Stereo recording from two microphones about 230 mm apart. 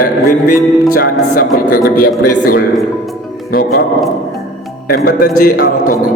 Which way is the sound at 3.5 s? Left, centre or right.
Left.